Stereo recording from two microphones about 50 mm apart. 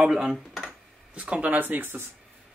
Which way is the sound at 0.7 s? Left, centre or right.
Right.